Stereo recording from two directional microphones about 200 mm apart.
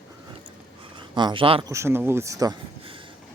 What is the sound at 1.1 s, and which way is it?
Speech, 20° right (ahead or behind).